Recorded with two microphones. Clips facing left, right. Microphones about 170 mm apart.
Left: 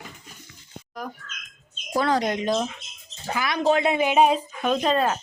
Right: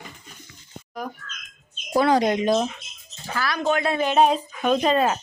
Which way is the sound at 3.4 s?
20° left (ahead or behind).